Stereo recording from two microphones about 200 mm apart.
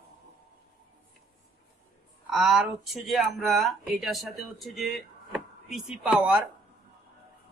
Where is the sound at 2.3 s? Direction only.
Centre (ahead or behind).